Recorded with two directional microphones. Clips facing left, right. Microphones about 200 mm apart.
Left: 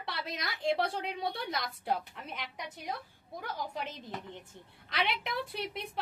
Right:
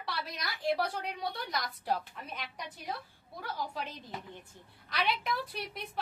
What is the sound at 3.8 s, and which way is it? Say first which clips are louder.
A woman's voice: left 1 dB; 20° left (ahead or behind).